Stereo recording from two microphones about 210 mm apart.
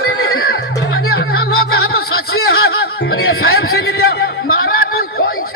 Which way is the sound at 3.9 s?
50° left (ahead or behind).